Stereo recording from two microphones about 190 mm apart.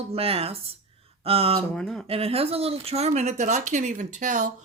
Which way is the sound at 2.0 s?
30° right (ahead or behind).